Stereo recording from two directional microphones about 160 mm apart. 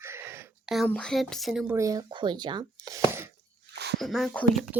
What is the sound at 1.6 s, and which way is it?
Speech, 15° right (ahead or behind).